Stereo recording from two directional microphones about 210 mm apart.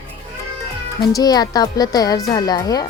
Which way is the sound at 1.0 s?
20° left (ahead or behind).